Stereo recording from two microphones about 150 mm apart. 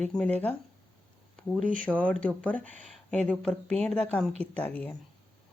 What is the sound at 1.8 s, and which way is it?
Speech, 10° left (ahead or behind).